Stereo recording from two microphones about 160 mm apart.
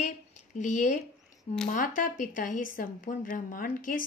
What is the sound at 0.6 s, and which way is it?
A woman's voice, 50° left (ahead or behind).